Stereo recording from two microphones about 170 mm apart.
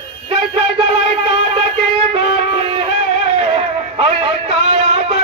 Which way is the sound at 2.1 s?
35° right (ahead or behind).